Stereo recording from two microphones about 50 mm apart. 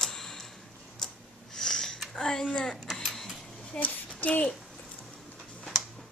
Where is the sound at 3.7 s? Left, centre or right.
Left.